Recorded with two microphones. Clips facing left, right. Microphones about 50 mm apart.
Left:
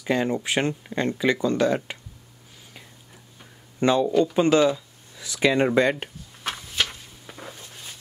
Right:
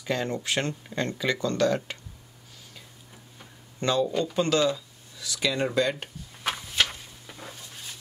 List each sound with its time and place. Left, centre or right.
0.0 s speech: centre
3.8 s speech: left
6.4 s walk: centre
7.2 s a sound: centre